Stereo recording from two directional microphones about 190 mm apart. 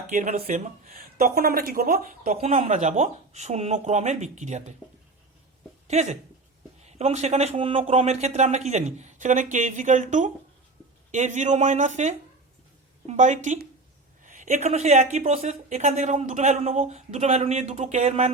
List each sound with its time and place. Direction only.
0.1 s speech: 35° right (ahead or behind)
5.9 s speech: 35° right (ahead or behind)